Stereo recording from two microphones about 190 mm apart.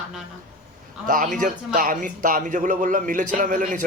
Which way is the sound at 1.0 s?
45° right (ahead or behind).